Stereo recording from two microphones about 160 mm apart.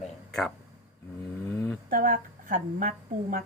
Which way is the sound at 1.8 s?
60° right (ahead or behind).